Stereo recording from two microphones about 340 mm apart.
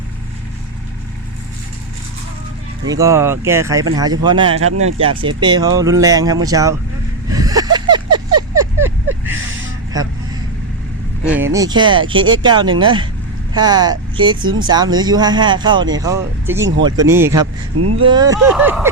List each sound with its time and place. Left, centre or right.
2.9 s speech: centre
4.6 s speech: right
4.9 s speech: centre
7.3 s vehicle: centre
10.0 s speech: centre
11.5 s speech: centre
17.7 s speech: right
18.0 s speech: centre